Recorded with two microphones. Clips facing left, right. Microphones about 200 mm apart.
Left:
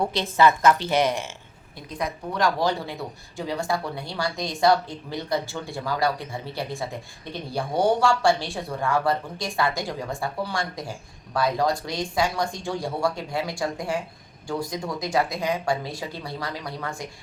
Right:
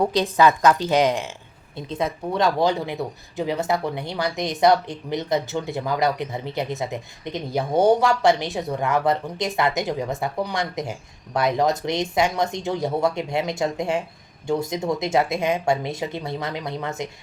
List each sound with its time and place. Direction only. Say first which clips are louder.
0.0 s a woman's voice: right 2 dB; 15° right (ahead or behind)